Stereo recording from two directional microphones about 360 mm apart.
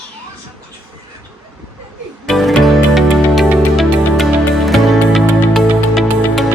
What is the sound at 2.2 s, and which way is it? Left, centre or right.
Music, centre.